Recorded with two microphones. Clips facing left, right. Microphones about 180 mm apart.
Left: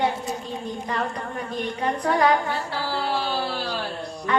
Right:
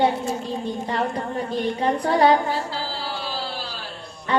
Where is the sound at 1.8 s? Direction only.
30° right (ahead or behind).